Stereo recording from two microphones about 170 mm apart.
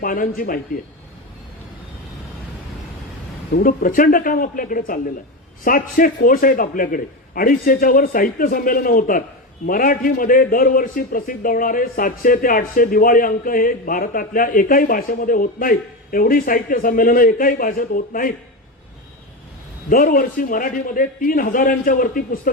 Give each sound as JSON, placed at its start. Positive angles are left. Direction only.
{"t": 0.0, "sound": "a man's voice", "side_deg": 55}
{"t": 3.5, "sound": "a man's voice", "side_deg": 60}
{"t": 19.9, "sound": "a man's voice", "side_deg": 60}